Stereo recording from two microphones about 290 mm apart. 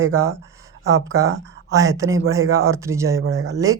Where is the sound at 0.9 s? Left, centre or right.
Centre.